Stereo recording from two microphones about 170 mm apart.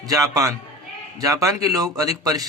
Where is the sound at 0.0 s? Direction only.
20° right (ahead or behind).